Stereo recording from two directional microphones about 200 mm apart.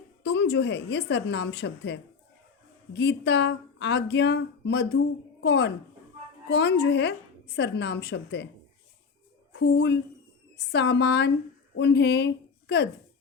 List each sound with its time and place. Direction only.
0.2 s speech: 60° left (ahead or behind)
9.5 s a woman's voice: 60° left (ahead or behind)